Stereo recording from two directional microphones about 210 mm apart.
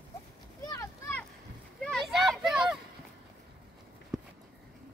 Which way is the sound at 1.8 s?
Centre (ahead or behind).